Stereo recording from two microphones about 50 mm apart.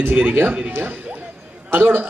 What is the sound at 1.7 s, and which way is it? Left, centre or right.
Speech, right.